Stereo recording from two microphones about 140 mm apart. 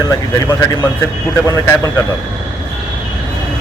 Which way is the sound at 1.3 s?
20° left (ahead or behind).